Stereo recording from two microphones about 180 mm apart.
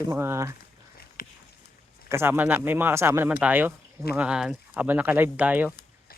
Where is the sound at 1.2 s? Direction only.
50° left (ahead or behind).